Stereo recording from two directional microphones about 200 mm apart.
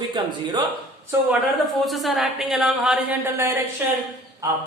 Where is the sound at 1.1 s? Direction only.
Centre (ahead or behind).